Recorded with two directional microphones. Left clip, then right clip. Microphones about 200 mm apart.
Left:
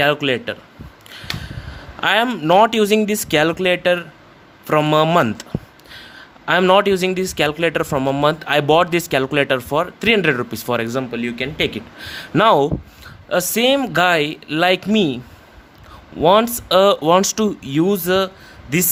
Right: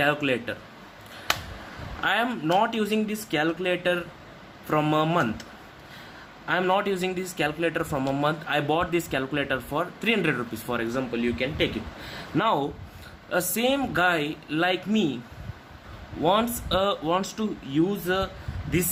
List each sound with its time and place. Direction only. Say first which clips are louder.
0.0 s speech: left 7 dB; 45° left (ahead or behind)
2.0 s speech: left 8 dB; 50° left (ahead or behind)
16.2 s speech: left 10 dB; 50° left (ahead or behind)